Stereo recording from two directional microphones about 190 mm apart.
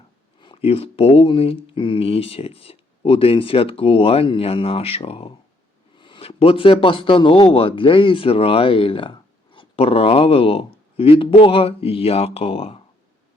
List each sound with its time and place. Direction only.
0.3 s speech: 25° left (ahead or behind)